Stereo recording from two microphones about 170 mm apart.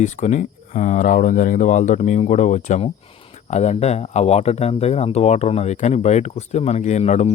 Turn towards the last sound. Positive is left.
turn(degrees=40)  # may be behind; listen again after turning